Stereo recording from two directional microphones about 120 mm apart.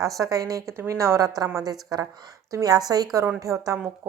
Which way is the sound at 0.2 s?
30° right (ahead or behind).